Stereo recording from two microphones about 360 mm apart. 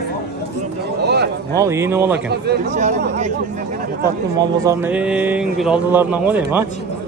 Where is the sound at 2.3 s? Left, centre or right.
Right.